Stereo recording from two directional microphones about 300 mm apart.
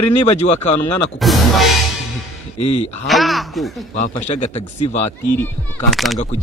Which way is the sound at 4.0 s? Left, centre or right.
Left.